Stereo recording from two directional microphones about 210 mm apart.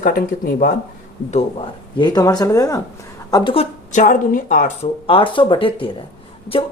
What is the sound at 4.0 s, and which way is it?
Speech, 40° left (ahead or behind).